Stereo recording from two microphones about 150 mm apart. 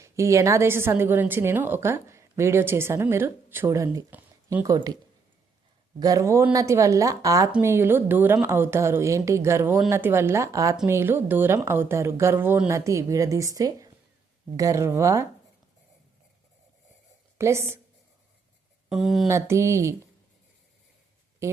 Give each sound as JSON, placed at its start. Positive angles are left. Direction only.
{"t": 0.0, "sound": "a woman's voice", "side_deg": -20}
{"t": 6.0, "sound": "a woman's voice", "side_deg": -25}
{"t": 17.3, "sound": "a woman's voice", "side_deg": -20}
{"t": 18.9, "sound": "speech", "side_deg": 0}
{"t": 19.3, "sound": "speech", "side_deg": -20}